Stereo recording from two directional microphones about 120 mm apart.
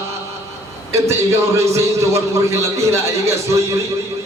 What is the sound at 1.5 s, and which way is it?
Speech, 25° right (ahead or behind).